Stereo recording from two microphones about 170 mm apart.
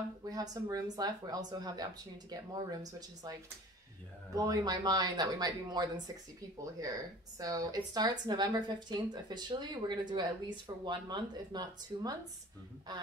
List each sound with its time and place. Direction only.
0.2 s speech: 20° right (ahead or behind)
7.3 s speech: 20° right (ahead or behind)